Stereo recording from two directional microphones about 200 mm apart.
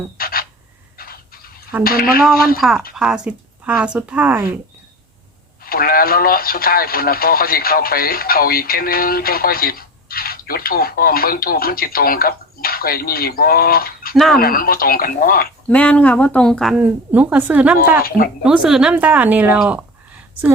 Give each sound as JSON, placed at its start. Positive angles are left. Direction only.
{"t": 0.2, "sound": "a sound", "side_deg": 50}
{"t": 1.8, "sound": "speech", "side_deg": 50}
{"t": 2.6, "sound": "a woman's voice", "side_deg": 0}
{"t": 5.6, "sound": "speech", "side_deg": 50}
{"t": 15.6, "sound": "a woman's voice", "side_deg": 5}